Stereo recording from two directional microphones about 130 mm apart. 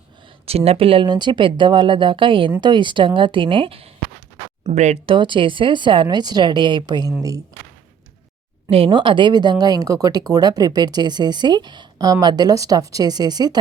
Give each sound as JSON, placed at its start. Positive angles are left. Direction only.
{"t": 0.4, "sound": "speech", "side_deg": -50}
{"t": 4.7, "sound": "speech", "side_deg": -60}
{"t": 5.0, "sound": "speech", "side_deg": -40}
{"t": 8.7, "sound": "speech", "side_deg": -40}